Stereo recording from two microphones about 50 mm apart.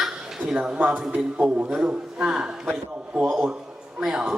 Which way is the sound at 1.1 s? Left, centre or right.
Right.